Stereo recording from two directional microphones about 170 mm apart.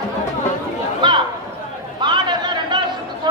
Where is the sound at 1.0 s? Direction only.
25° right (ahead or behind).